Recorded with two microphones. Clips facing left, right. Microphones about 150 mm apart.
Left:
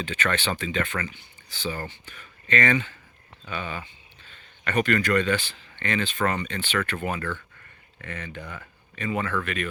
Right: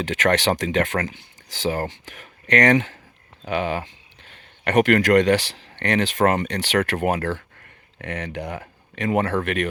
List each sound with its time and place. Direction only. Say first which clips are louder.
0.0 s speech: right 7 dB; 85° right
1.0 s speech: right 5 dB; 90° right
7.9 s speech: right 7 dB; 70° right (ahead or behind)